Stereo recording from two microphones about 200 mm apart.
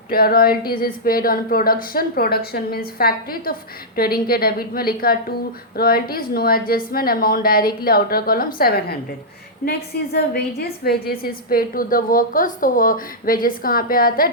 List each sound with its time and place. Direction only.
0.1 s speech: 50° left (ahead or behind)